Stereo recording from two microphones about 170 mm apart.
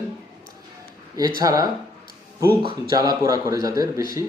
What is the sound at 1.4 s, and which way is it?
Speech, 20° right (ahead or behind).